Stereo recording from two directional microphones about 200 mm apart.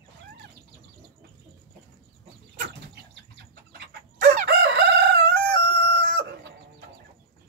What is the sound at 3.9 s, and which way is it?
Crowing, 50° right (ahead or behind).